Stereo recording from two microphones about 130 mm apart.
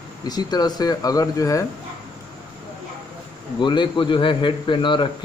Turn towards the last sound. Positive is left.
turn(degrees=35)  # may be behind; listen again after turning